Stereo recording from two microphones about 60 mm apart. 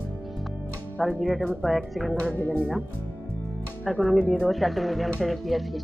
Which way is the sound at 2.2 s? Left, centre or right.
Left.